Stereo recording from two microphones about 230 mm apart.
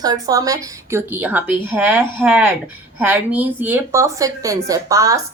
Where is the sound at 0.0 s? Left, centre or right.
Centre.